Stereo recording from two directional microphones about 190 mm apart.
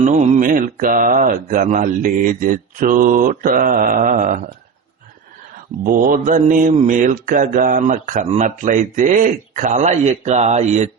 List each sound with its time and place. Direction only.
0.0 s speech: 40° right (ahead or behind)
5.8 s mantra: 50° right (ahead or behind)